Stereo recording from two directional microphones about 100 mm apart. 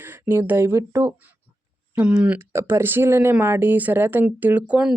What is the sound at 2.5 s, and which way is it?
Speech, 25° right (ahead or behind).